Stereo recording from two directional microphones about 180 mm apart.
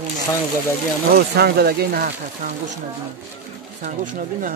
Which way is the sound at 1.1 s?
65° right (ahead or behind).